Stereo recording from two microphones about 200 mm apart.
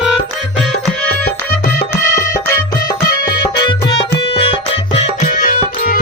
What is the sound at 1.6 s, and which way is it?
Music, 50° left (ahead or behind).